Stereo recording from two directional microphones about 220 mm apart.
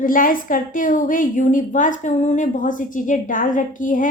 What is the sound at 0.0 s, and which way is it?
A woman's voice, 40° left (ahead or behind).